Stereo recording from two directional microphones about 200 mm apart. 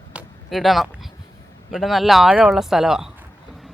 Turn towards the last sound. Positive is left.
turn(degrees=0)  # may be behind; listen again after turning